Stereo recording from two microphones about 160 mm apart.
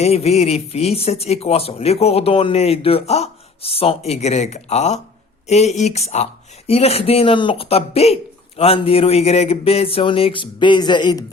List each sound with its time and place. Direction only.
0.0 s speech: 40° left (ahead or behind)